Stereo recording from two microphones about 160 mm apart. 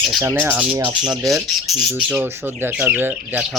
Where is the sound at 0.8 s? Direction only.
5° right (ahead or behind).